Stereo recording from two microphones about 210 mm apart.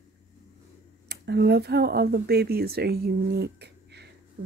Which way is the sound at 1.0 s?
50° right (ahead or behind).